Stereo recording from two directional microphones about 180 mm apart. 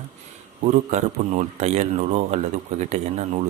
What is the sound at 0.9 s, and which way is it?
Speech, 40° right (ahead or behind).